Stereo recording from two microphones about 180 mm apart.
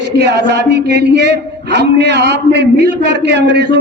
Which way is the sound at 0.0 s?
65° right (ahead or behind).